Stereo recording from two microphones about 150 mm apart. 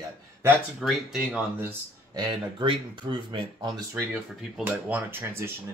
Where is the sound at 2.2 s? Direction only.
30° right (ahead or behind).